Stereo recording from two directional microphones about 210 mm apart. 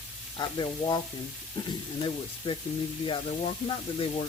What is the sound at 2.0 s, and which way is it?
Speech, 25° left (ahead or behind).